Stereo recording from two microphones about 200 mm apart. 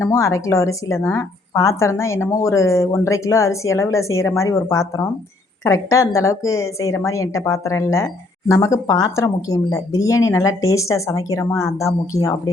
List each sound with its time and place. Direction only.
0.0 s a woman's voice: 15° left (ahead or behind)